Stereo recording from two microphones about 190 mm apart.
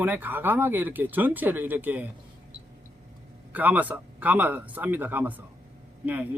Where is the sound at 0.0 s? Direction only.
10° right (ahead or behind).